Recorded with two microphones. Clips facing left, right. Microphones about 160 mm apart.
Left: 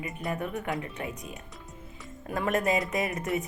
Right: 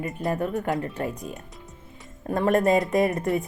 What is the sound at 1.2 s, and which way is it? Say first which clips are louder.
Music: right 5 dB; centre (ahead or behind).